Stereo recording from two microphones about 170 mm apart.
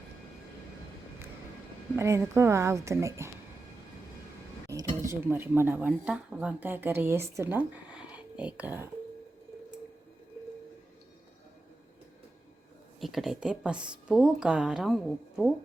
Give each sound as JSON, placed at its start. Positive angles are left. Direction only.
{"t": 2.0, "sound": "a woman's voice", "side_deg": -15}
{"t": 4.7, "sound": "speech", "side_deg": -20}
{"t": 13.0, "sound": "a woman's voice", "side_deg": 0}